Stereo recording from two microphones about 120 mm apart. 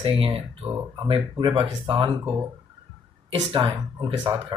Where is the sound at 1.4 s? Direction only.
45° right (ahead or behind).